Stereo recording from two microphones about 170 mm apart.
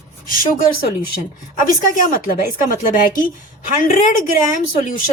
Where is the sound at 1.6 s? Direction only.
50° left (ahead or behind).